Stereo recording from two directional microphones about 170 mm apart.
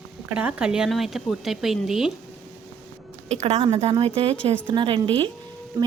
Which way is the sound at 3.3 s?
40° right (ahead or behind).